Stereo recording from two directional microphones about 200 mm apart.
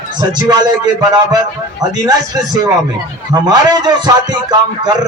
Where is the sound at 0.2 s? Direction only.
20° right (ahead or behind).